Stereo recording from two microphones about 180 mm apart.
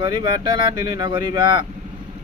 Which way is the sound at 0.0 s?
25° right (ahead or behind).